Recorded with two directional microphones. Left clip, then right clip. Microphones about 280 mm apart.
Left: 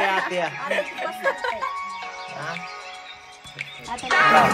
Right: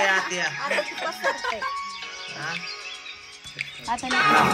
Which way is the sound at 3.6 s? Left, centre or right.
Centre.